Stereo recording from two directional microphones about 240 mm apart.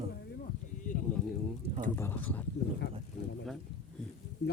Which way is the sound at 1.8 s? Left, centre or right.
Centre.